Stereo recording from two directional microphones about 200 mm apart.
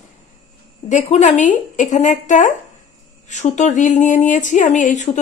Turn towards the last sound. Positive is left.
turn(degrees=35)  # may be behind; listen again after turning